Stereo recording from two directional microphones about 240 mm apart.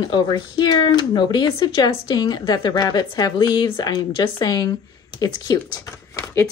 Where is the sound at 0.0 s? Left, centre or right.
Centre.